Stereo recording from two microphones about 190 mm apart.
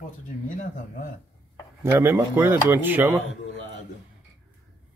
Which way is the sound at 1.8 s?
10° right (ahead or behind).